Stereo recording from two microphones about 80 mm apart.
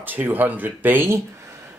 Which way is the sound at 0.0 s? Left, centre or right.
Right.